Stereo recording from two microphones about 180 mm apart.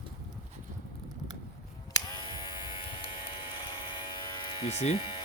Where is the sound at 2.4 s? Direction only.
30° left (ahead or behind).